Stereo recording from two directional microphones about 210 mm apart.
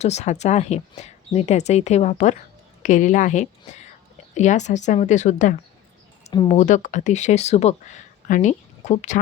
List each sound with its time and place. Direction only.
0.0 s speech: 30° left (ahead or behind)